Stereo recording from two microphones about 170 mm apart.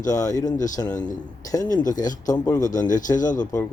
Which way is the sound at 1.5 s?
20° left (ahead or behind).